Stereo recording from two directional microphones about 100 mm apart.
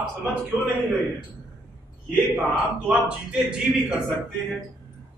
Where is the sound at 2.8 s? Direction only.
10° right (ahead or behind).